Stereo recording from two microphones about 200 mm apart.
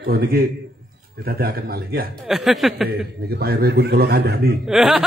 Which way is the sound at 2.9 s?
50° right (ahead or behind).